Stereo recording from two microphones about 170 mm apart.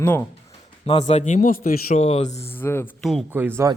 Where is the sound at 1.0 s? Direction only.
45° left (ahead or behind).